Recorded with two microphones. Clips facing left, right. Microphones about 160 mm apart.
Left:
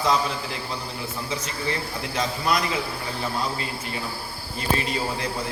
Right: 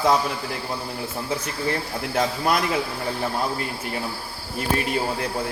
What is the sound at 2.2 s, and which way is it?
Speech, 55° right (ahead or behind).